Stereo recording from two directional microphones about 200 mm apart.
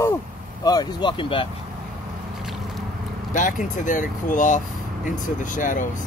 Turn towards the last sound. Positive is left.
turn(degrees=40)  # may be behind; listen again after turning